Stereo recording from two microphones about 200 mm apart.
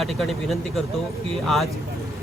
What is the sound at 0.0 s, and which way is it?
Speech, centre (ahead or behind).